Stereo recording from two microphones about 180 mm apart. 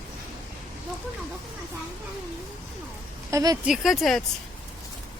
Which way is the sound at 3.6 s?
Centre (ahead or behind).